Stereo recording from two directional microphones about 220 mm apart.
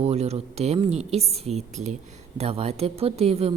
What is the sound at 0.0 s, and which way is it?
Speech, 30° right (ahead or behind).